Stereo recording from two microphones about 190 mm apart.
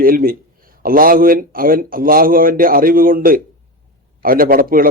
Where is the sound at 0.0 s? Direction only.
50° right (ahead or behind).